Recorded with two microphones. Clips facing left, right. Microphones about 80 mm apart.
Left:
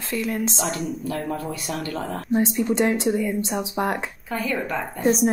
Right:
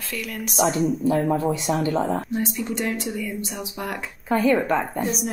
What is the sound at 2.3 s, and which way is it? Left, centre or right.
A woman's voice, left.